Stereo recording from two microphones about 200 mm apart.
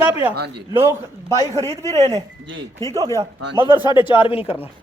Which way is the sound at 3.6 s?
25° right (ahead or behind).